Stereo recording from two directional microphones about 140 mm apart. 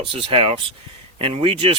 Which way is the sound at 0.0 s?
40° right (ahead or behind).